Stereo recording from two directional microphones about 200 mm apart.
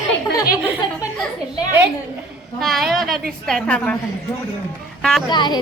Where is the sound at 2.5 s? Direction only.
Centre (ahead or behind).